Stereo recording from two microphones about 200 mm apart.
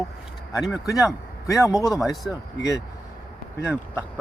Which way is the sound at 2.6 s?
15° left (ahead or behind).